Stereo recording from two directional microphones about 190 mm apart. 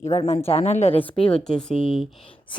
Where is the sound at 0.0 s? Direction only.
35° left (ahead or behind).